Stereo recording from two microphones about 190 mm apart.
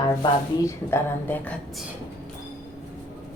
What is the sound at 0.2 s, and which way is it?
Speech, 15° left (ahead or behind).